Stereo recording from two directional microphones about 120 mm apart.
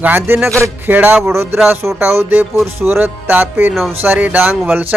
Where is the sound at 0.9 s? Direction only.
15° right (ahead or behind).